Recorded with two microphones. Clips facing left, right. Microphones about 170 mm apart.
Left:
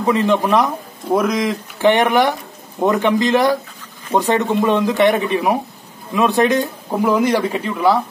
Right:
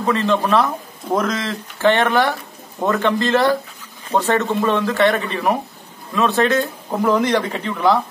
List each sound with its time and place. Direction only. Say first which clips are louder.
0.0 s a man's voice: left 2 dB; 15° left (ahead or behind)